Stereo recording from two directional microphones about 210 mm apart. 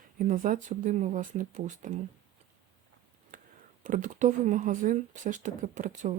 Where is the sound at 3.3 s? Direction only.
40° right (ahead or behind).